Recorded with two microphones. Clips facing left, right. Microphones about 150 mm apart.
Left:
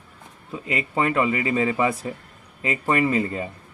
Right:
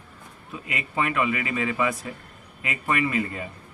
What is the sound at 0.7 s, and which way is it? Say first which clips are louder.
A man's voice: left 4 dB; 35° left (ahead or behind).